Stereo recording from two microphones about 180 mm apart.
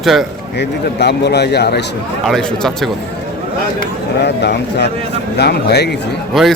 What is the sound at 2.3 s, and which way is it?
Speech, 5° left (ahead or behind).